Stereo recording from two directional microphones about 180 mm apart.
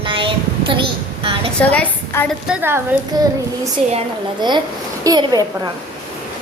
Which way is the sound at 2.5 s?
10° right (ahead or behind).